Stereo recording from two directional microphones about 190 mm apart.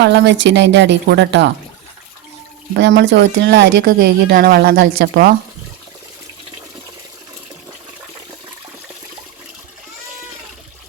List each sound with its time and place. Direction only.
0.0 s a woman's voice: 70° right (ahead or behind)
2.7 s a woman's voice: 70° right (ahead or behind)
4.0 s a woman's voice: 55° right (ahead or behind)